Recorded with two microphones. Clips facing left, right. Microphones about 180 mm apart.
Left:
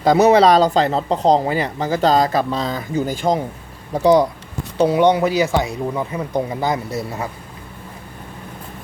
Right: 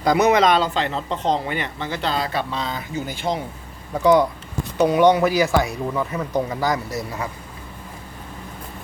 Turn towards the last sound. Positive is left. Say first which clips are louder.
# left 3 dB
turn(degrees=25)  # may be behind; listen again after turning